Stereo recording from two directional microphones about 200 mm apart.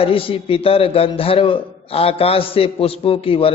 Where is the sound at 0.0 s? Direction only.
25° left (ahead or behind).